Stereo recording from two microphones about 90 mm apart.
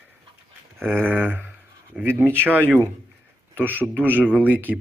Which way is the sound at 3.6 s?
20° right (ahead or behind).